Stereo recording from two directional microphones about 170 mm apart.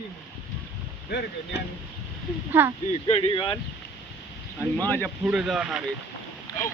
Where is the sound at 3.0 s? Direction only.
30° left (ahead or behind).